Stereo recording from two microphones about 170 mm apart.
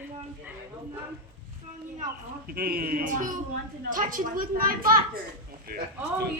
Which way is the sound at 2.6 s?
60° right (ahead or behind).